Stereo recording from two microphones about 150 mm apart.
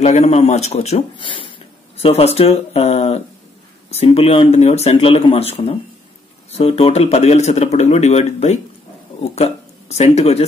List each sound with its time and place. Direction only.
0.0 s speech: 45° left (ahead or behind)